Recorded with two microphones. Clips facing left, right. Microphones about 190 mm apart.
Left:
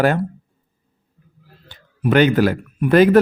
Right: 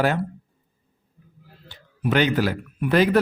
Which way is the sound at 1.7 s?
50° left (ahead or behind).